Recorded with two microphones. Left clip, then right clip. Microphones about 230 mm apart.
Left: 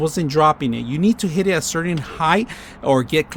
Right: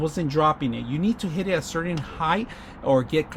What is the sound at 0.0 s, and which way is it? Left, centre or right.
Speech, left.